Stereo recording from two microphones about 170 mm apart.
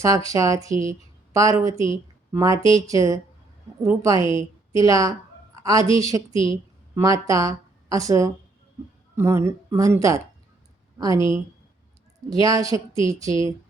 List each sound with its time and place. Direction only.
0.0 s a woman's voice: 20° right (ahead or behind)
6.3 s a woman's voice: 30° left (ahead or behind)
7.3 s a woman's voice: 20° right (ahead or behind)